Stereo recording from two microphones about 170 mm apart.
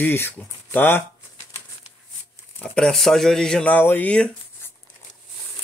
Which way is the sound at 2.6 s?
5° left (ahead or behind).